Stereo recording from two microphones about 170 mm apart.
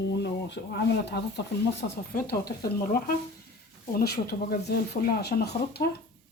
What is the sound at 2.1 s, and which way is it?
Speech, 60° left (ahead or behind).